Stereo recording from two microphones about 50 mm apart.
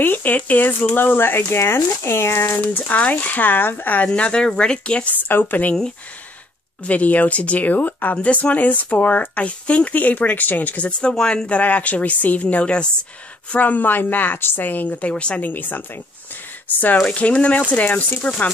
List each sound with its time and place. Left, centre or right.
0.0 s speech: left
2.6 s speech: left
4.1 s speech: centre
5.1 s speech: left
6.9 s speech: left; by 11.4 s centre
11.4 s speech: left
15.4 s speech: left
17.1 s speech: left